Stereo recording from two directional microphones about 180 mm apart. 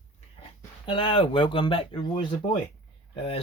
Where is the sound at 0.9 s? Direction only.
30° left (ahead or behind).